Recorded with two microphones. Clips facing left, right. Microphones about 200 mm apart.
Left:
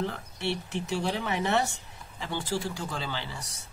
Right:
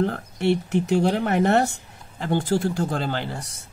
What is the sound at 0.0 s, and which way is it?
Speech, 50° right (ahead or behind).